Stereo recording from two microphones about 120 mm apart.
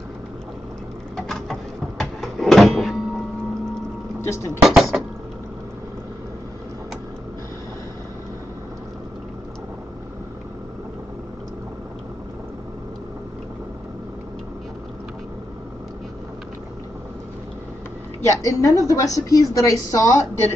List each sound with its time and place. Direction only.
1.1 s a sound: centre (ahead or behind)
4.2 s speech: 20° left (ahead or behind)
4.6 s dishes: centre (ahead or behind)
18.2 s a woman's voice: 25° left (ahead or behind)